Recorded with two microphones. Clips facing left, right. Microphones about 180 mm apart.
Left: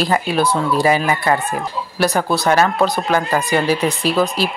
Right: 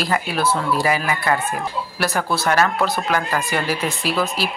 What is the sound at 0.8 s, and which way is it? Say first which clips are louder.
Speech: left 4 dB; 25° left (ahead or behind).